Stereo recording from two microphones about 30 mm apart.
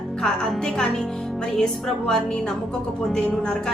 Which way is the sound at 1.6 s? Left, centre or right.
Left.